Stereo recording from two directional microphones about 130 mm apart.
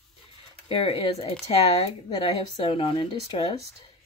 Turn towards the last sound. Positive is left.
turn(degrees=45)  # may be behind; listen again after turning